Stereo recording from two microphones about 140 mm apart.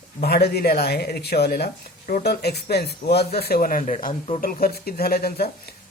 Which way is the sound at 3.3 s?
90° left.